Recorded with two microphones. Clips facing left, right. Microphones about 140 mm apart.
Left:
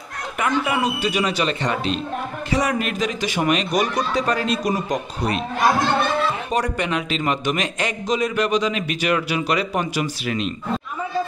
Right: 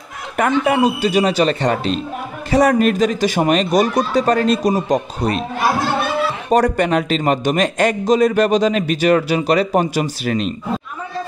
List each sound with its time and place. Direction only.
1.0 s a man's voice: 35° right (ahead or behind)
5.6 s chatter: 5° right (ahead or behind)
6.5 s a man's voice: 45° right (ahead or behind)